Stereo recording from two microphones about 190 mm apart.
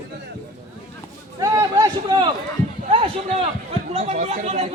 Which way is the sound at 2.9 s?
30° right (ahead or behind).